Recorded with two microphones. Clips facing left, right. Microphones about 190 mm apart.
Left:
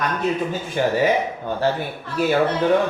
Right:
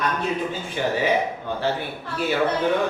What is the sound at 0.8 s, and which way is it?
Speech, 50° left (ahead or behind).